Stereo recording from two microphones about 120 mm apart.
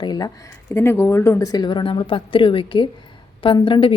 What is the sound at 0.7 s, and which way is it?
A woman's voice, 20° left (ahead or behind).